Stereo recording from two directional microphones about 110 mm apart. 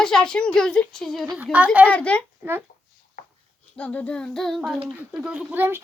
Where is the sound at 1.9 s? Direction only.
10° left (ahead or behind).